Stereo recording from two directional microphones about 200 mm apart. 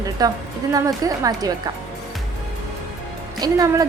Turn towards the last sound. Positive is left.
turn(degrees=-20)  # may be behind; listen again after turning